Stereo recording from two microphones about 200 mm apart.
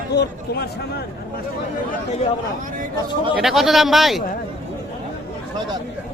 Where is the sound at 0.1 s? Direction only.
55° left (ahead or behind).